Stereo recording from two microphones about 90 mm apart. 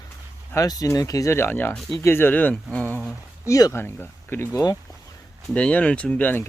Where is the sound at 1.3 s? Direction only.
25° left (ahead or behind).